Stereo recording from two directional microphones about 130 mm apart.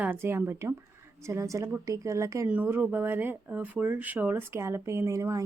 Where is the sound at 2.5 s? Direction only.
15° right (ahead or behind).